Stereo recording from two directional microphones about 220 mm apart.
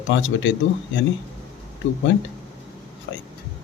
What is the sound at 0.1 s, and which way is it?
Speech, 55° left (ahead or behind).